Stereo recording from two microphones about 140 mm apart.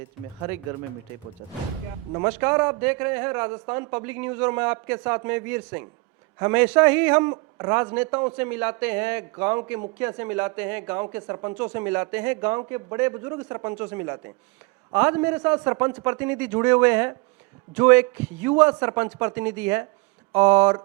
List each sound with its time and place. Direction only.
2.2 s speech: 20° right (ahead or behind)